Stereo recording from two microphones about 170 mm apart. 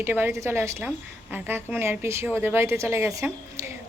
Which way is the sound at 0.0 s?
15° right (ahead or behind).